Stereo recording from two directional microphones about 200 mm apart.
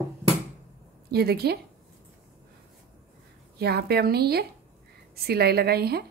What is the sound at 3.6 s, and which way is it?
A woman's voice, 55° right (ahead or behind).